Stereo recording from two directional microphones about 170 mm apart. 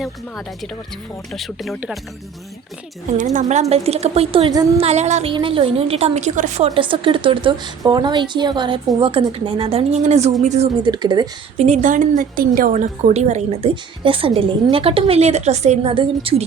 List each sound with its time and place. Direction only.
1.3 s speech: centre (ahead or behind)
3.3 s a woman's voice: 40° right (ahead or behind)
5.3 s a woman's voice: 30° right (ahead or behind)
6.7 s a woman's voice: 30° right (ahead or behind)
10.8 s speech: 25° right (ahead or behind)
11.5 s a woman's voice: 40° right (ahead or behind)